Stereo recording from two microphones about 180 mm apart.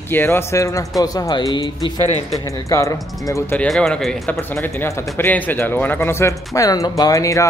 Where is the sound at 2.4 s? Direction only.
20° left (ahead or behind).